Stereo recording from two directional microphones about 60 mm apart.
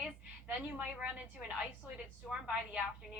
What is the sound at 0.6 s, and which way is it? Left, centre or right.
Speech, centre.